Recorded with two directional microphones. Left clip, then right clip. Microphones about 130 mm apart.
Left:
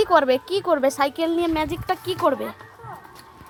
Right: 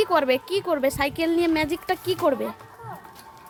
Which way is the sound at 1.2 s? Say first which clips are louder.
Even; 15° right (ahead or behind).